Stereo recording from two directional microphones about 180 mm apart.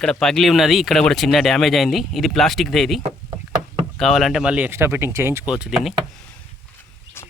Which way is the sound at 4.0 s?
Centre (ahead or behind).